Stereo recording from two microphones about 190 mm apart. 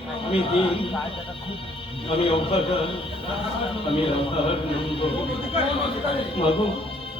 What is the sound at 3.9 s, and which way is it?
Speech, 30° left (ahead or behind).